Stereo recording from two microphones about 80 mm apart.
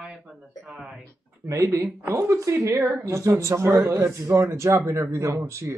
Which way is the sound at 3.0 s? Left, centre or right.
Right.